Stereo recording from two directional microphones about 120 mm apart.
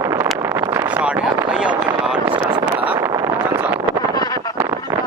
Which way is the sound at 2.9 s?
25° right (ahead or behind).